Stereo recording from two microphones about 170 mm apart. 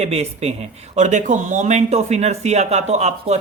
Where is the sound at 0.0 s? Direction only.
40° right (ahead or behind).